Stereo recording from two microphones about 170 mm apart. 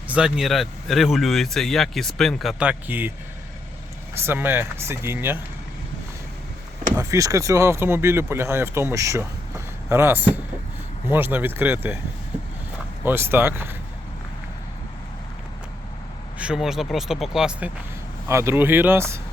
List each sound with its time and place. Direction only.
0.1 s speech: 5° right (ahead or behind)
4.1 s speech: 15° right (ahead or behind)
6.9 s speech: 20° right (ahead or behind)
13.1 s speech: 15° right (ahead or behind)
16.4 s speech: 5° right (ahead or behind)
18.3 s speech: 15° right (ahead or behind)